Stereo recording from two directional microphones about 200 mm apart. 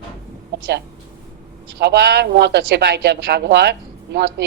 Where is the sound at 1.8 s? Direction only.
55° right (ahead or behind).